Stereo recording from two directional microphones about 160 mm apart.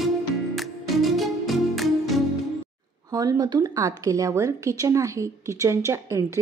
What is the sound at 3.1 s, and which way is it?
A woman's voice, 20° right (ahead or behind).